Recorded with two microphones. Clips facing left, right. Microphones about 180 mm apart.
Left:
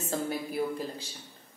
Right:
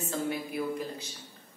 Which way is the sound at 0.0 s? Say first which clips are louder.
Even; 35° left (ahead or behind).